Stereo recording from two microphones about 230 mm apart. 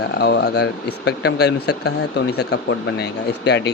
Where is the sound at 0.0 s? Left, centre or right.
Left.